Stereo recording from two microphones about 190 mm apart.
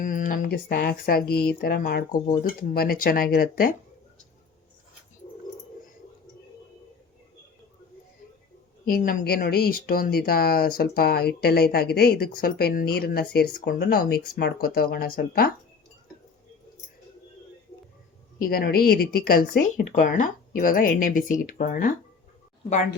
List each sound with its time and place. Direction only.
0.0 s speech: 45° left (ahead or behind)
8.9 s speech: 50° left (ahead or behind)
18.3 s speech: 50° left (ahead or behind)